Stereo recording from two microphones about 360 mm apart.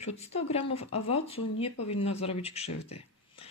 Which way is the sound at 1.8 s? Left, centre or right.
Left.